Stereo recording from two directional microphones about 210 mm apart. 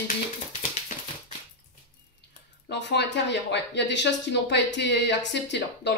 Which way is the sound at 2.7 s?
55° left (ahead or behind).